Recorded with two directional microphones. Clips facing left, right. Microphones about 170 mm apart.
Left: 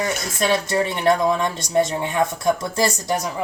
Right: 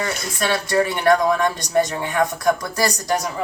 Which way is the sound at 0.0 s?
20° left (ahead or behind).